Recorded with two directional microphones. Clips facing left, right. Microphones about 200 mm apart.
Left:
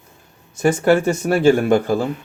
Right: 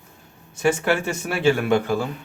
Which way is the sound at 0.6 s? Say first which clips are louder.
Left 6 dB; 45° left (ahead or behind).